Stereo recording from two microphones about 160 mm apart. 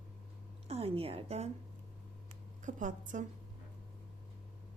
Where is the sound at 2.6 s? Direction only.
50° right (ahead or behind).